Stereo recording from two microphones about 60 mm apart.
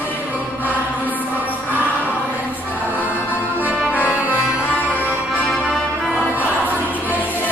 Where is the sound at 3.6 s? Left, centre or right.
Right.